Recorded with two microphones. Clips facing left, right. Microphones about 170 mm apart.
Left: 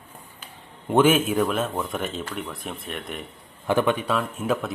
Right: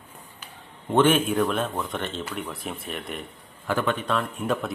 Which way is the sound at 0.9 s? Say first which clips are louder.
Left 1 dB; 5° left (ahead or behind).